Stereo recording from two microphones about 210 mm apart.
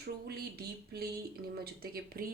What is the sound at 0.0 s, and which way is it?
Speech, 50° right (ahead or behind).